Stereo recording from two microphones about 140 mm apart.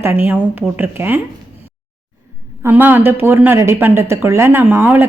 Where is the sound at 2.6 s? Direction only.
10° right (ahead or behind).